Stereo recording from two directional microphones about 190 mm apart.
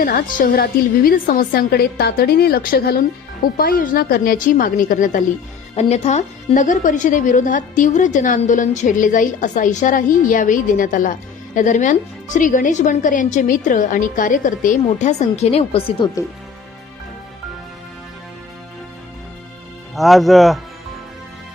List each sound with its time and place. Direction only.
0.0 s a woman's voice: 45° left (ahead or behind)
20.0 s speech: centre (ahead or behind)